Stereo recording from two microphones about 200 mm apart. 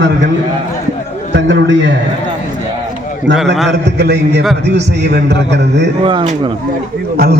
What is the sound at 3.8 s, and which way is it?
A man's voice, 55° right (ahead or behind).